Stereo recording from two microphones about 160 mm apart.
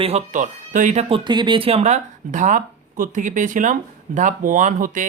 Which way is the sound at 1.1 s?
30° right (ahead or behind).